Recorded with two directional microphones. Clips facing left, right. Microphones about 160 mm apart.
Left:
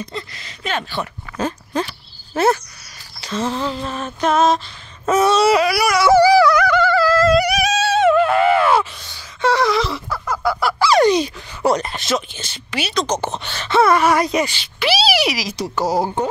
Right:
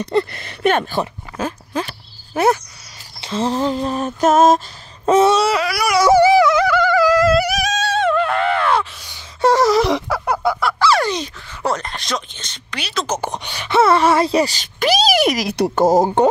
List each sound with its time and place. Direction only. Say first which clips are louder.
0.0 s speech: right 11 dB; 65° right (ahead or behind)
1.4 s speech: left 1 dB; 5° right (ahead or behind)
2.3 s speech: right 1 dB; 15° right (ahead or behind)
3.2 s speech: right 3 dB; 25° right (ahead or behind); by 4.6 s 45° right (ahead or behind)
5.0 s wail: right 3 dB; 30° right (ahead or behind)
5.4 s a sound: left 3 dB; 15° left (ahead or behind)
6.0 s music: even; 20° right (ahead or behind)
6.7 s a sound: right 1 dB; 15° right (ahead or behind)
7.3 s a sound: left 2 dB; centre (ahead or behind)
9.4 s gasp: right 3 dB; 40° right (ahead or behind)
9.8 s a sound: right 6 dB; 75° right (ahead or behind)
10.6 s fowl: left 3 dB; 10° left (ahead or behind)
13.0 s speech: left 1 dB; 10° right (ahead or behind); by 16.0 s 50° right (ahead or behind)